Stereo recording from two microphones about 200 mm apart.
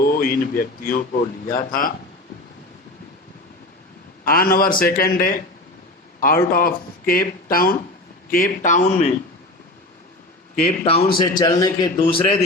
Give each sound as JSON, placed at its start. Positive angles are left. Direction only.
{"t": 0.0, "sound": "a sound", "side_deg": 45}
{"t": 1.5, "sound": "speech", "side_deg": 45}
{"t": 4.3, "sound": "speech", "side_deg": 45}
{"t": 10.5, "sound": "a man's voice", "side_deg": 35}